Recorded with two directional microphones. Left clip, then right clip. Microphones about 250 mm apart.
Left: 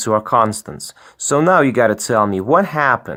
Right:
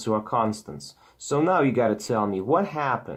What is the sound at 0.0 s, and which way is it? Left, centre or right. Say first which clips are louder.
Speech: left 10 dB; left.